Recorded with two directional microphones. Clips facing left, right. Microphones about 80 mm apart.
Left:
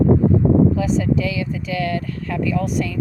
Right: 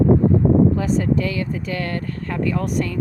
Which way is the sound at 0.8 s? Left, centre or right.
Right.